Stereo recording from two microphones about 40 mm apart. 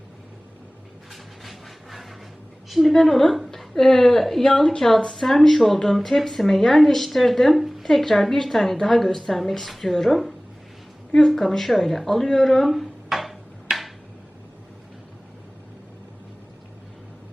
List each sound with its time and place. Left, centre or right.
1.1 s a sound: centre
2.6 s a woman's voice: centre
2.9 s a woman's voice: centre
3.8 s a woman's voice: centre
7.9 s speech: centre
13.7 s a sound: right